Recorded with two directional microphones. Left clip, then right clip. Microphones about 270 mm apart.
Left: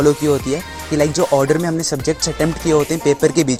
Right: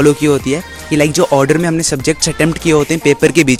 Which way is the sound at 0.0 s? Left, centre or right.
Right.